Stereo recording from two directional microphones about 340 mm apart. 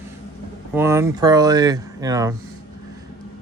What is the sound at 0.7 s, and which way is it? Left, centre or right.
Speech, centre.